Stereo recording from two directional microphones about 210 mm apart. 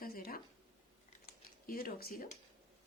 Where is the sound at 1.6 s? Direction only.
45° left (ahead or behind).